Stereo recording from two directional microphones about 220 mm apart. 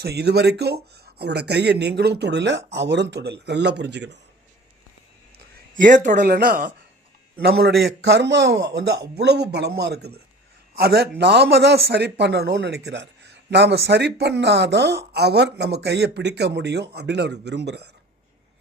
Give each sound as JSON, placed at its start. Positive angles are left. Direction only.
{"t": 0.0, "sound": "speech", "side_deg": -50}
{"t": 5.7, "sound": "speech", "side_deg": -35}